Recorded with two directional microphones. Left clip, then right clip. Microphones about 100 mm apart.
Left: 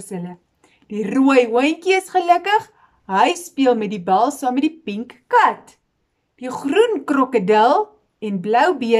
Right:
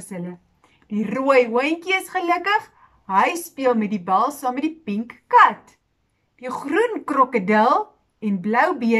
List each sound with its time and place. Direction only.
0.0 s a woman's voice: 30° left (ahead or behind)